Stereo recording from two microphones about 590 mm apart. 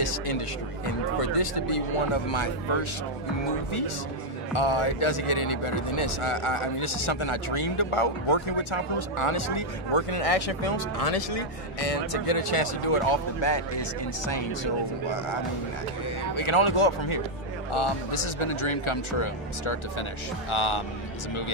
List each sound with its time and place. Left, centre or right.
0.0 s a sound: left
1.2 s speech: left
4.6 s speech: left
16.3 s speech: left